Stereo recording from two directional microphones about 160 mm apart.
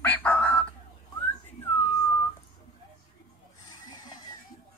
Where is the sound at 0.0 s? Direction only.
10° left (ahead or behind).